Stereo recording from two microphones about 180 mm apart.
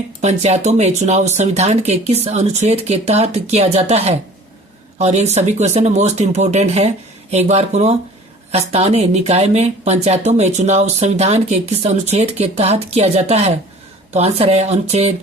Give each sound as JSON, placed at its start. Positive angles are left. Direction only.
{"t": 0.2, "sound": "speech", "side_deg": -40}